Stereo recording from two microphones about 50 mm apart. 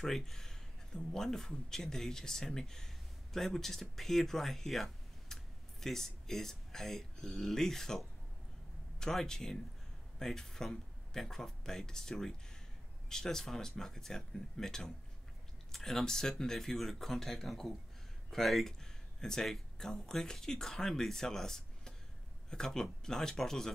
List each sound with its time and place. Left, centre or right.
0.0 s speech: centre